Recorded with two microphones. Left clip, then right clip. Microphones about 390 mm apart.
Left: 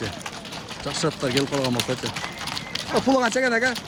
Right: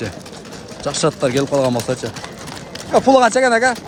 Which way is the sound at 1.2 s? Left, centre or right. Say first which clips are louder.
Right 7 dB; right.